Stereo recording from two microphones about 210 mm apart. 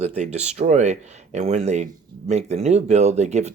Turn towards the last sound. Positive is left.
turn(degrees=-30)  # may be behind; listen again after turning